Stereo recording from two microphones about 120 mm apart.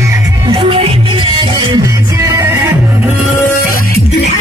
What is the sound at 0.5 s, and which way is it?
Music, 50° right (ahead or behind).